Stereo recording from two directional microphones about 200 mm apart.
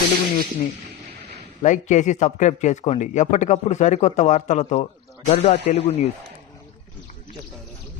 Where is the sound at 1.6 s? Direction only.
40° left (ahead or behind).